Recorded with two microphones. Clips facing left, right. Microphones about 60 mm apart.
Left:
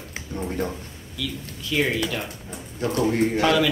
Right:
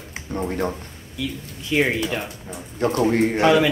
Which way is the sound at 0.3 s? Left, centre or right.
Right.